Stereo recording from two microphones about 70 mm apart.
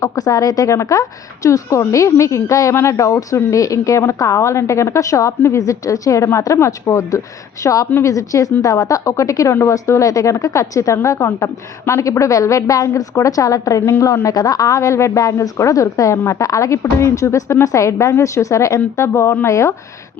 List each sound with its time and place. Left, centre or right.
0.0 s a woman's voice: left
14.3 s a woman's voice: left
18.9 s a woman's voice: left